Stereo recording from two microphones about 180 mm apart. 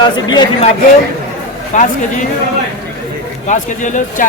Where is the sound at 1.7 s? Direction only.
45° left (ahead or behind).